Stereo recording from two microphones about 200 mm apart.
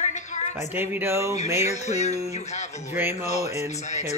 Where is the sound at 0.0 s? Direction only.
35° left (ahead or behind).